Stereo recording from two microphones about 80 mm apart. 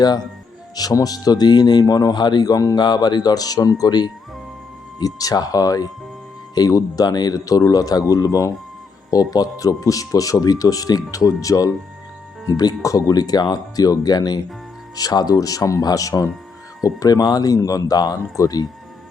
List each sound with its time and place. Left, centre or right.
0.8 s speech: left